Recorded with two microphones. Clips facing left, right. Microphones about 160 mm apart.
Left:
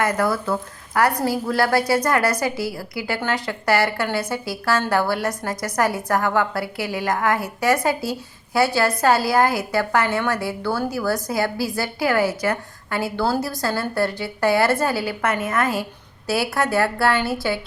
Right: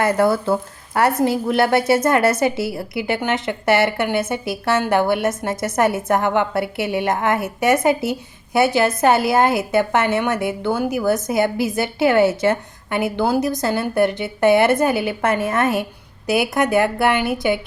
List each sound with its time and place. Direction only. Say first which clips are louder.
0.0 s a woman's voice: right 4 dB; 30° right (ahead or behind)